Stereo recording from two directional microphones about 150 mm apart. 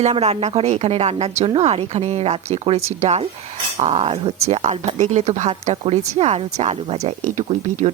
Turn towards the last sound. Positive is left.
turn(degrees=-55)  # may be behind; listen again after turning